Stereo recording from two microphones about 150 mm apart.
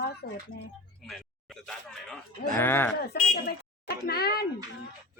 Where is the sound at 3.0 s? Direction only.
85° left.